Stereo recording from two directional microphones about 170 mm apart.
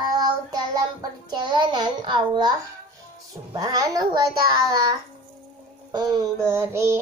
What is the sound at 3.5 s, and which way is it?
Speech, 20° right (ahead or behind).